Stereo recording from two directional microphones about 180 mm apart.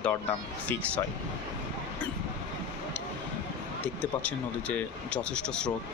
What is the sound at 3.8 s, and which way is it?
Speech, 10° left (ahead or behind).